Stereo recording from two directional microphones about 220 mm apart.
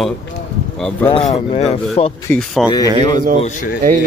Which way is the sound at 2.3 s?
Centre (ahead or behind).